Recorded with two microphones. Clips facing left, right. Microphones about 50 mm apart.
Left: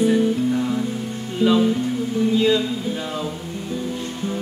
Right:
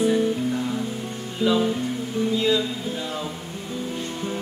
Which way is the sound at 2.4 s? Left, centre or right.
Centre.